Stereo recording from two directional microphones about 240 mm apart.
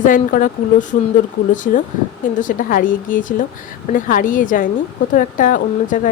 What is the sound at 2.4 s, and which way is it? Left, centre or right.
Speech, left.